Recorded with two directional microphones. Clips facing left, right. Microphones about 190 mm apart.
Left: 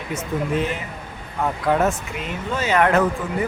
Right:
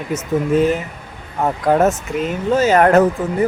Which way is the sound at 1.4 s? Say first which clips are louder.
Right 5 dB; 40° right (ahead or behind).